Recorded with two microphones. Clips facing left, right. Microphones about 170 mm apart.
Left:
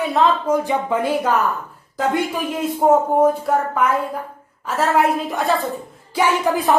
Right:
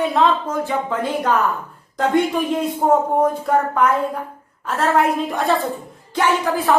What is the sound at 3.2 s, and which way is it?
Speech, 5° left (ahead or behind).